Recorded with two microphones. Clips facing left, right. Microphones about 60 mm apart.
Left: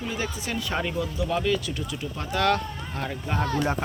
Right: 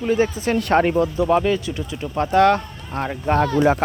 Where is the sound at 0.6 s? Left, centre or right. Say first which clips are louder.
Right 12 dB; right.